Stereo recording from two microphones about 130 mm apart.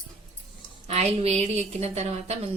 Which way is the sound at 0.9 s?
55° right (ahead or behind).